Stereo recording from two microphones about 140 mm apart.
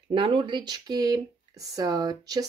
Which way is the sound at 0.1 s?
40° right (ahead or behind).